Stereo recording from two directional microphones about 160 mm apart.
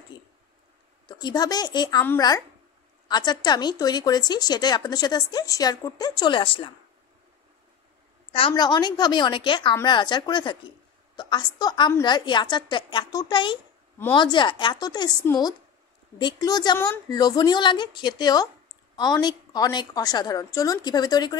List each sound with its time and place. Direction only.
1.0 s speech: 25° left (ahead or behind)
8.3 s speech: 30° left (ahead or behind)